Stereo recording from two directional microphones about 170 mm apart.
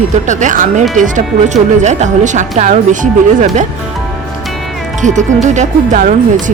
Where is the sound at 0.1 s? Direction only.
45° right (ahead or behind).